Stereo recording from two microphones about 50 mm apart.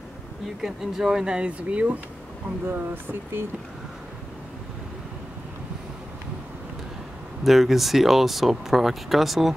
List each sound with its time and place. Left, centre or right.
0.6 s speech: centre; by 2.0 s right
2.7 s speech: right
7.4 s speech: centre